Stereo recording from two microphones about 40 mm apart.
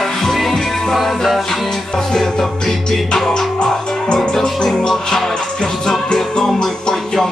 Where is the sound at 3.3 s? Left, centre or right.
Centre.